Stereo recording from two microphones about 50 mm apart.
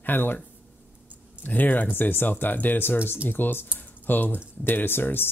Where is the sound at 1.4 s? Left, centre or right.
Left.